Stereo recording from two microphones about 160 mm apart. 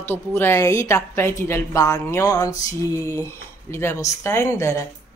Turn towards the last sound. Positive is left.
turn(degrees=20)  # may be behind; listen again after turning